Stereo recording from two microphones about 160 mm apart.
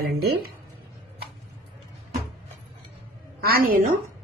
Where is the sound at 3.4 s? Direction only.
70° right (ahead or behind).